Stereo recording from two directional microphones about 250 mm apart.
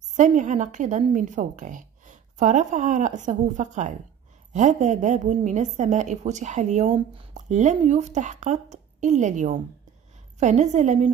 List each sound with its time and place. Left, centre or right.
0.1 s a woman's voice: right